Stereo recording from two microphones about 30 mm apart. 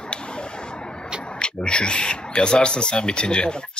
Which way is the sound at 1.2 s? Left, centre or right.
Left.